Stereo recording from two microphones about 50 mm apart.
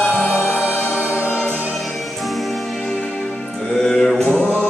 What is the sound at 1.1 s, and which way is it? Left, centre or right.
Music, right.